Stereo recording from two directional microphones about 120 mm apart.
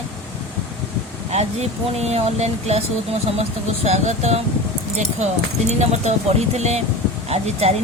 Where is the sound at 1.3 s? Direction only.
65° right (ahead or behind).